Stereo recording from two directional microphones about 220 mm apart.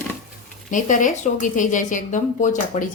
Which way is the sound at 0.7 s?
35° left (ahead or behind).